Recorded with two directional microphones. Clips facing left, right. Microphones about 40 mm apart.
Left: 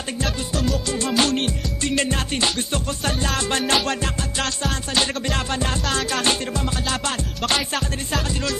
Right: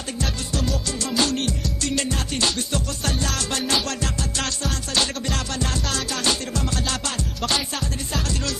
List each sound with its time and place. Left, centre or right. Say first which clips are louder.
0.2 s music: left 2 dB; centre
1.0 s music: left 2 dB; left
4.4 s music: left 4 dB; centre
5.0 s music: left 3 dB; left